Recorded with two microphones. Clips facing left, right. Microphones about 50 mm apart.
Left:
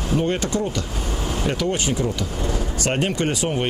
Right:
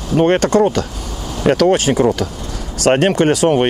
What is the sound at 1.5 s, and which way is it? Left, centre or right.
Speech, right.